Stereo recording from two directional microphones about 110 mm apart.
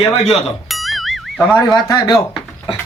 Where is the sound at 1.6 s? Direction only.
40° left (ahead or behind).